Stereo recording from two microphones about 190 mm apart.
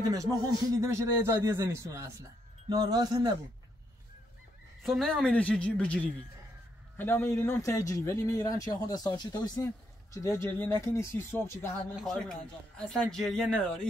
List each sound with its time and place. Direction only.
0.7 s speech: 15° right (ahead or behind)
4.8 s a man's voice: centre (ahead or behind)
11.9 s speech: centre (ahead or behind)